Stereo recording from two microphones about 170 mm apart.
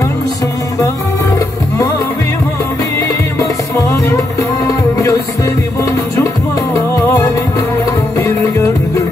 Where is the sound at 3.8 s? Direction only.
20° left (ahead or behind).